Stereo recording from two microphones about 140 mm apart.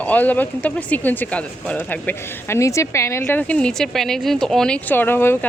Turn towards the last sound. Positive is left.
turn(degrees=15)  # may be behind; listen again after turning